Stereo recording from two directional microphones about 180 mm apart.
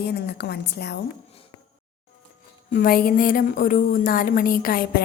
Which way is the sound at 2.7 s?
50° left (ahead or behind).